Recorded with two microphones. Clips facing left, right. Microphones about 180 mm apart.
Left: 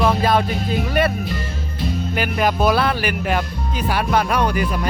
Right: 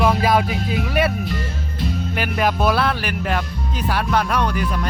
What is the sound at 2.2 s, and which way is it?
Speech, centre (ahead or behind).